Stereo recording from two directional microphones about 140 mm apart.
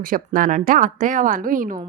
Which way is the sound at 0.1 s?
80° right.